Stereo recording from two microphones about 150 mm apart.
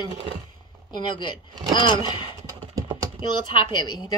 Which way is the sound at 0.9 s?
30° left (ahead or behind).